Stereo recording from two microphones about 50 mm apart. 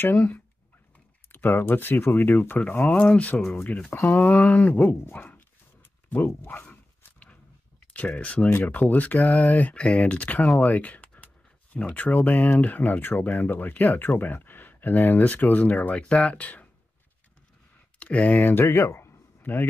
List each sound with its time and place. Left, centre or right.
0.0 s speech: left
1.3 s speech: left
6.0 s zipper: left
7.8 s speech: left
10.6 s a sound: left
11.9 s speech: left
17.9 s speech: left
18.5 s speech: left
19.4 s speech: left